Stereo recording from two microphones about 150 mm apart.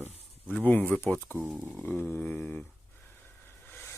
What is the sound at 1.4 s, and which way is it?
Speech, 5° right (ahead or behind).